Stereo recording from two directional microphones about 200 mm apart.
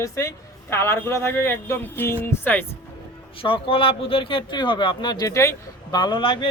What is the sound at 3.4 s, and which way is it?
A man's voice, 25° left (ahead or behind).